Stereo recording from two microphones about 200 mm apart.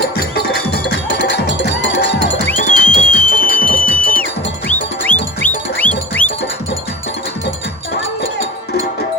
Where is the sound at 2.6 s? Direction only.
40° left (ahead or behind).